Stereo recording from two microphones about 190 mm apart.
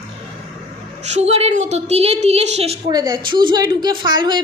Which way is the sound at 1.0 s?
35° right (ahead or behind).